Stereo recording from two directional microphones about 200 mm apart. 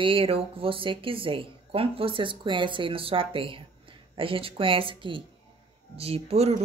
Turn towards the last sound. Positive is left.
turn(degrees=-30)  # may be behind; listen again after turning